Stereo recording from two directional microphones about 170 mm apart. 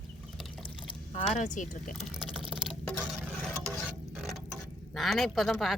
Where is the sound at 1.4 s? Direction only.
50° left (ahead or behind).